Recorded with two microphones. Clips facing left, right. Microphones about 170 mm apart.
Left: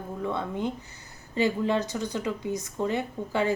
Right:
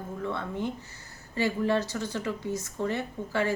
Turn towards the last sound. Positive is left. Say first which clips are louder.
# left 2 dB
turn(degrees=15)  # may be behind; listen again after turning